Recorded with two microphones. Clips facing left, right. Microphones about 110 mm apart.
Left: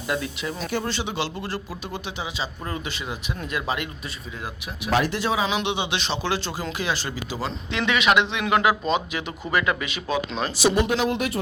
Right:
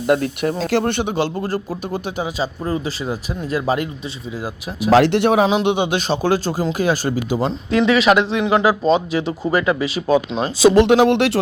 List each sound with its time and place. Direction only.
0.1 s speech: 50° right (ahead or behind)
0.6 s speech: 85° right; by 2.5 s 45° right (ahead or behind)
2.6 s speech: 30° right (ahead or behind)
4.9 s speech: 85° right; by 5.5 s 60° right (ahead or behind)
5.5 s speech: 45° right (ahead or behind)
10.8 s speech: 80° right